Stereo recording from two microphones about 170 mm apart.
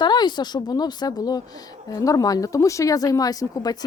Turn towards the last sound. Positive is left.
turn(degrees=20)  # may be behind; listen again after turning